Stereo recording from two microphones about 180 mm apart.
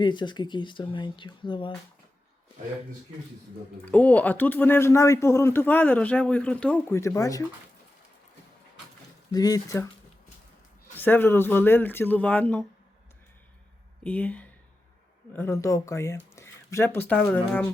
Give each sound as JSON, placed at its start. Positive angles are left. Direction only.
{"t": 0.0, "sound": "speech", "side_deg": 25}
{"t": 3.8, "sound": "speech", "side_deg": 10}
{"t": 9.3, "sound": "speech", "side_deg": 20}
{"t": 10.9, "sound": "speech", "side_deg": 10}
{"t": 14.0, "sound": "speech", "side_deg": 10}